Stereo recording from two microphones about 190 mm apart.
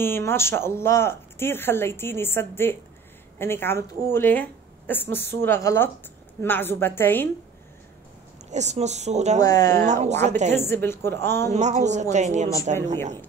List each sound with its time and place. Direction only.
0.0 s speech: 10° left (ahead or behind)
8.5 s speech: 35° right (ahead or behind)
9.4 s speech: 20° left (ahead or behind)
10.2 s speech: 35° right (ahead or behind)
10.5 s speech: 10° left (ahead or behind)
11.5 s speech: 40° right (ahead or behind)